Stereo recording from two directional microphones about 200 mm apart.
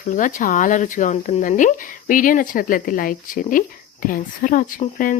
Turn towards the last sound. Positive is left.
turn(degrees=40)  # may be behind; listen again after turning